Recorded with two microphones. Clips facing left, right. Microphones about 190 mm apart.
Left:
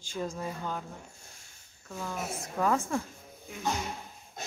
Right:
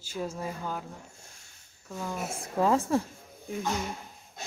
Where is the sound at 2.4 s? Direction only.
30° right (ahead or behind).